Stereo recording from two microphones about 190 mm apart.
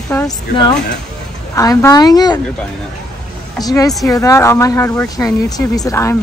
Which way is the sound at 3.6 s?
20° left (ahead or behind).